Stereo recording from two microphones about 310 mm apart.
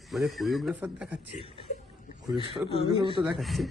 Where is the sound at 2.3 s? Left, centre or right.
Centre.